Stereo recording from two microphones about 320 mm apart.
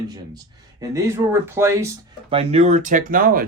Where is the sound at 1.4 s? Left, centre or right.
Centre.